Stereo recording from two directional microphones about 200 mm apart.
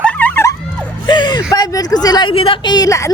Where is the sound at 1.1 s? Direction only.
20° left (ahead or behind).